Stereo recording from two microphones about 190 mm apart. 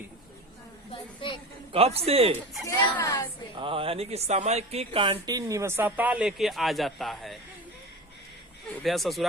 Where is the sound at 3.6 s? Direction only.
30° right (ahead or behind); by 7.3 s centre (ahead or behind).